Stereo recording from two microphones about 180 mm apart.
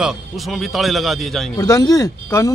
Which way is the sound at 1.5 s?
20° left (ahead or behind).